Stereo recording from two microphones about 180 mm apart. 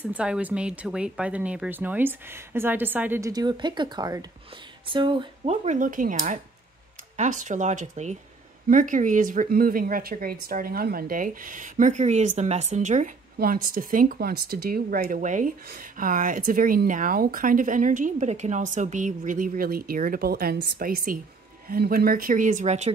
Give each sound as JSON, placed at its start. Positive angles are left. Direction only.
{"t": 0.0, "sound": "a woman's voice", "side_deg": -5}